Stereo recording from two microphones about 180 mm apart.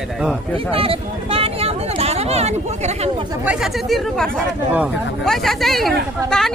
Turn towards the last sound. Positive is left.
turn(degrees=0)  # may be behind; listen again after turning